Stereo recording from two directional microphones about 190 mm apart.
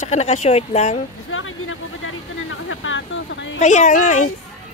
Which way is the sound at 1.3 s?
90° left.